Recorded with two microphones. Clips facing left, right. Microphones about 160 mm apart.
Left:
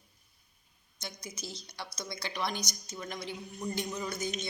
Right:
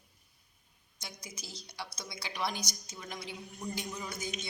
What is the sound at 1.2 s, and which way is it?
A woman's voice, 5° right (ahead or behind).